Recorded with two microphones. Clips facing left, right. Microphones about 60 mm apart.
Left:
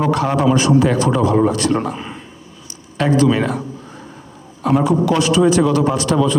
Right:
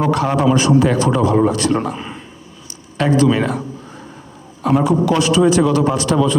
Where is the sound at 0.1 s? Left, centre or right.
Right.